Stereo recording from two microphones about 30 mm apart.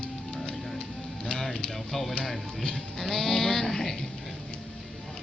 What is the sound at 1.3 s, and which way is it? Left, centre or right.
Music, centre.